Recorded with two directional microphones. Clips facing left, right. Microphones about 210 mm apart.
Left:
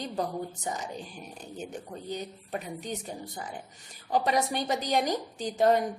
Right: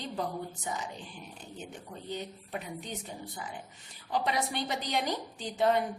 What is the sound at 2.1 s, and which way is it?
Speech, 40° left (ahead or behind).